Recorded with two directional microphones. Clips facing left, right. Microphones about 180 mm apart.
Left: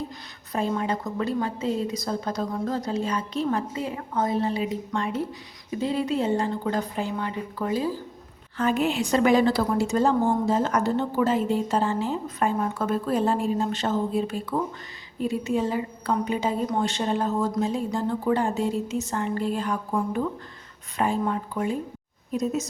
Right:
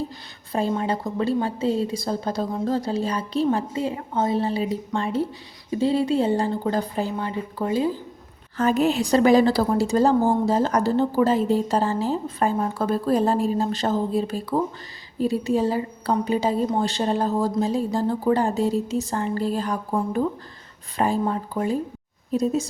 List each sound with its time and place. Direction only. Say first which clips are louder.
0.5 s a woman's voice: right 2 dB; 30° right (ahead or behind)
8.5 s a woman's voice: right 3 dB; 40° right (ahead or behind)